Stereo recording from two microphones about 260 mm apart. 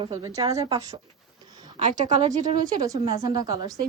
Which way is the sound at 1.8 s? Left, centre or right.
Right.